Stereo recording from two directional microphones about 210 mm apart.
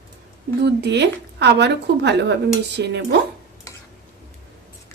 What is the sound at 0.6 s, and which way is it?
Speech, 55° right (ahead or behind).